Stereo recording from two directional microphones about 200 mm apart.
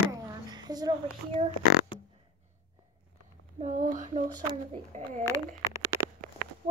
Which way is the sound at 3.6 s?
40° right (ahead or behind).